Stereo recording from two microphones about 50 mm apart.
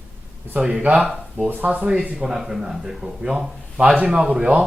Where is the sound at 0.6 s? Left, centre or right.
Centre.